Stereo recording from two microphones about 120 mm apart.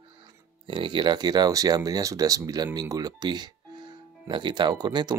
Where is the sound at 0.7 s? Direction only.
40° right (ahead or behind).